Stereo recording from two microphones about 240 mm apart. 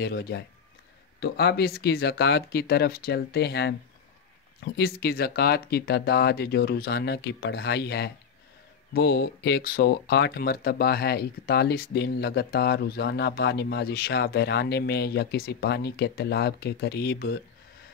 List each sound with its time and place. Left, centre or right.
0.0 s speech: left